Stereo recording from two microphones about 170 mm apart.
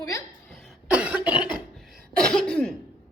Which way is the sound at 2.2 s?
5° left (ahead or behind).